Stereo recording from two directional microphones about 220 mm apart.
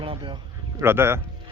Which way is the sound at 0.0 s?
25° right (ahead or behind).